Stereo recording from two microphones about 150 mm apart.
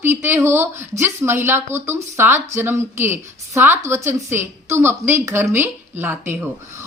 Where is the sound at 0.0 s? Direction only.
15° right (ahead or behind).